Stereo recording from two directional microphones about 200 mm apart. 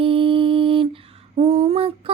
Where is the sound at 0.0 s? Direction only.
25° right (ahead or behind).